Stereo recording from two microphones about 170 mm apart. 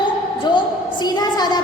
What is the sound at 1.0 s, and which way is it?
Speech, 25° left (ahead or behind).